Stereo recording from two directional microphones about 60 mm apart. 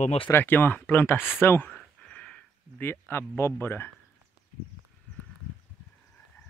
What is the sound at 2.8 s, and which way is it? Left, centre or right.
Speech, left.